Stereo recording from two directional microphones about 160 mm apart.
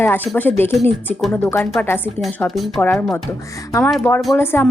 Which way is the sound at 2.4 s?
Centre (ahead or behind).